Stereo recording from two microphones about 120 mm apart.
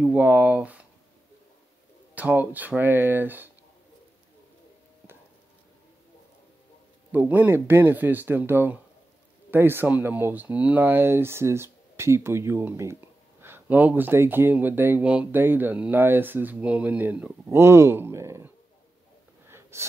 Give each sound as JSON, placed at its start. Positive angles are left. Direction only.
{"t": 0.0, "sound": "speech", "side_deg": -15}
{"t": 2.1, "sound": "speech", "side_deg": -15}
{"t": 7.1, "sound": "speech", "side_deg": -15}
{"t": 19.4, "sound": "wheeze", "side_deg": -20}